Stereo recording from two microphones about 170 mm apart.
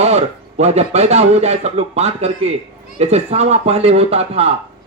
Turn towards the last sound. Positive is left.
turn(degrees=-35)  # may be behind; listen again after turning